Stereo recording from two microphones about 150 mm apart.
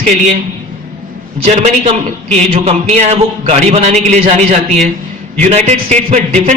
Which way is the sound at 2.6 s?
45° right (ahead or behind).